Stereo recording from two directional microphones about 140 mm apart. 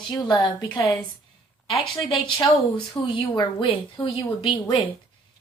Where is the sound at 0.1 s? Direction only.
30° left (ahead or behind).